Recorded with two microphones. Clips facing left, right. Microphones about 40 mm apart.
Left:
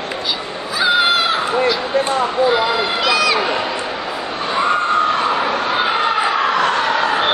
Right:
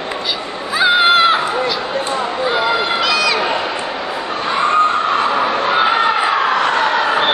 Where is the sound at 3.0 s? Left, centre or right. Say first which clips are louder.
Even; centre.